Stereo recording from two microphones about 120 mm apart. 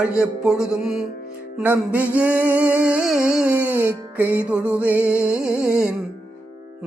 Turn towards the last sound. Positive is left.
turn(degrees=-10)  # may be behind; listen again after turning